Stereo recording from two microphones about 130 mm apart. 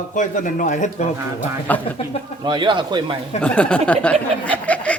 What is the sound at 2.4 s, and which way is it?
Speech, 35° right (ahead or behind).